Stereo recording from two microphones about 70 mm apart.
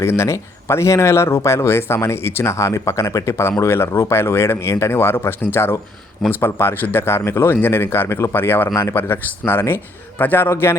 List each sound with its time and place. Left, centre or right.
0.0 s speech: left